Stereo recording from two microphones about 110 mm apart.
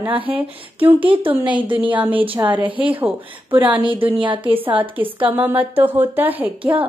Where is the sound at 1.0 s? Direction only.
50° right (ahead or behind).